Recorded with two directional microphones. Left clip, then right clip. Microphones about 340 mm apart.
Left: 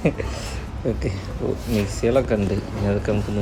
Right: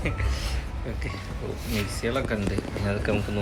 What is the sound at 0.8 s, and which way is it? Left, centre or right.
Speech, centre.